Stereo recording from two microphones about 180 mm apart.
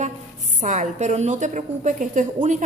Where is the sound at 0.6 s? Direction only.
45° right (ahead or behind).